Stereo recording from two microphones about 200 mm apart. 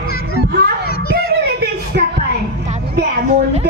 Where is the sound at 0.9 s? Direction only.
50° left (ahead or behind).